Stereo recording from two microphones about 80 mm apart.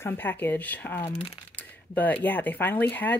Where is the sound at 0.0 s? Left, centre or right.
Left.